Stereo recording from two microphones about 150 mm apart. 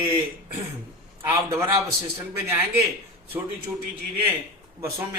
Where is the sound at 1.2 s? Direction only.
15° right (ahead or behind).